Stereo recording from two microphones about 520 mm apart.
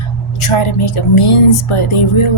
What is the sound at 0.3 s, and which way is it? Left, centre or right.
Speech, left.